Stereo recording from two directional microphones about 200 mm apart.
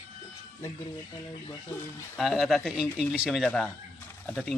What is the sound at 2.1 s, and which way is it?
Speech, centre (ahead or behind).